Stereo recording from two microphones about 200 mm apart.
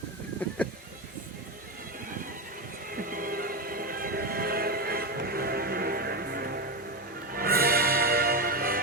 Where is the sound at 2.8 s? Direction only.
45° right (ahead or behind).